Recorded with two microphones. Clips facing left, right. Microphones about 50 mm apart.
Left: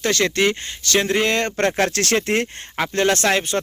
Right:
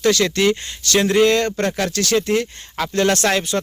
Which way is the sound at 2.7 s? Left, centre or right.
Left.